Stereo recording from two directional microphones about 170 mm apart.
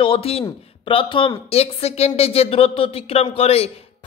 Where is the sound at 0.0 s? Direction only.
35° left (ahead or behind).